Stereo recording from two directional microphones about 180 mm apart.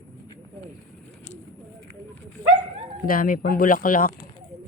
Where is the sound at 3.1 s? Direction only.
50° left (ahead or behind).